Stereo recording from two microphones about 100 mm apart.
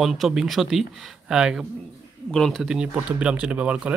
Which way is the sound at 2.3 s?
5° left (ahead or behind).